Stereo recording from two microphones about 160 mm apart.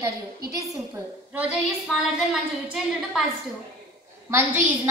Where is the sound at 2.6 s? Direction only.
5° right (ahead or behind).